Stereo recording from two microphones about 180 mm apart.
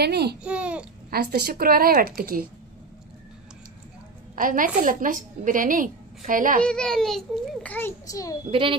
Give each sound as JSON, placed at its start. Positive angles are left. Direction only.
{"t": 0.0, "sound": "speech", "side_deg": -65}
{"t": 0.4, "sound": "a child's voice", "side_deg": -5}
{"t": 1.1, "sound": "speech", "side_deg": -60}
{"t": 4.4, "sound": "a woman's voice", "side_deg": -50}
{"t": 6.6, "sound": "a child's voice", "side_deg": 5}
{"t": 8.5, "sound": "a child's voice", "side_deg": -30}